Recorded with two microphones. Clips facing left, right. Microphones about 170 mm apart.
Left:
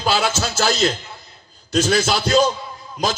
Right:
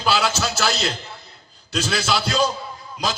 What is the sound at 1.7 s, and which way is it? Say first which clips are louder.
Speech: left 5 dB; 45° left (ahead or behind).